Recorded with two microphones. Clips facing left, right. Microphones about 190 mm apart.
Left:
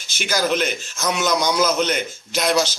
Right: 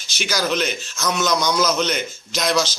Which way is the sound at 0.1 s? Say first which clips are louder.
Left 1 dB; 50° left (ahead or behind).